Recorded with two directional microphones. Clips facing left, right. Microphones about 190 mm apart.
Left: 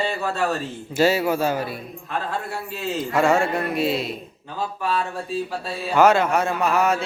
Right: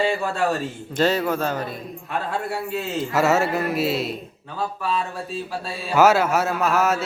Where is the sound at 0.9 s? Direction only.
10° left (ahead or behind).